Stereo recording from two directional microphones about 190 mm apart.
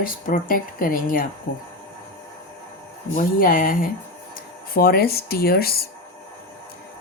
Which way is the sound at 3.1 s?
45° left (ahead or behind).